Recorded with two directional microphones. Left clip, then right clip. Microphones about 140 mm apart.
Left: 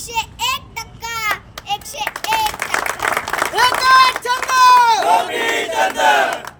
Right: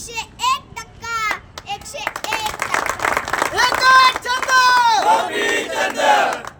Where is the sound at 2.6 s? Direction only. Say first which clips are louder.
Even; 15° right (ahead or behind).